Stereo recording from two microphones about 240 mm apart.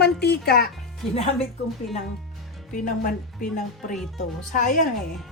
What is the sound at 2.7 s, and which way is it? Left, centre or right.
Speech, left.